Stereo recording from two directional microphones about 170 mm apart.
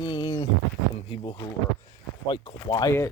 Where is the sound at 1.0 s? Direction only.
30° left (ahead or behind).